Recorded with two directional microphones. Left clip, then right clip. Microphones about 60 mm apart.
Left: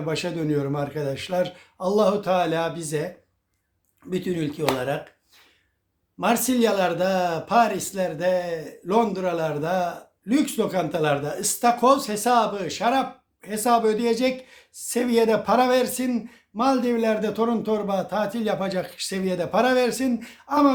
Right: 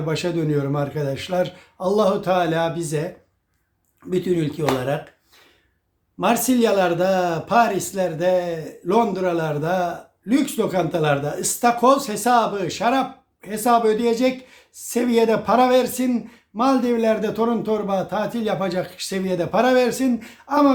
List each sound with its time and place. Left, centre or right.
0.0 s speech: left
4.1 s speech: centre
6.1 s speech: centre